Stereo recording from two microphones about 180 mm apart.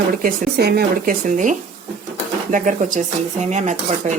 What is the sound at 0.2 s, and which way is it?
Speech, 55° right (ahead or behind).